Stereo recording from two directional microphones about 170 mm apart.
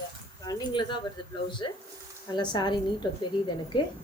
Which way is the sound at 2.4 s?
25° left (ahead or behind).